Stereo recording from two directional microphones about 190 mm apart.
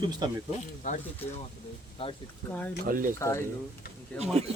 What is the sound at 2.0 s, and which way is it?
Speech, 30° left (ahead or behind).